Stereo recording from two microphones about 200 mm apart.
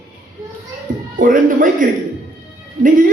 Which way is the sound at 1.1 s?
40° right (ahead or behind).